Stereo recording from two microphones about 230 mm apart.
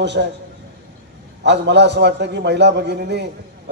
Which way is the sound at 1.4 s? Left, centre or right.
Right.